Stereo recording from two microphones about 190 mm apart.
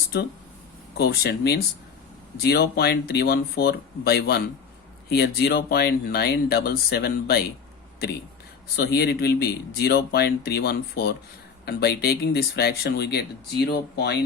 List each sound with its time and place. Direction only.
0.9 s speech: 60° left (ahead or behind)
8.7 s speech: 60° left (ahead or behind)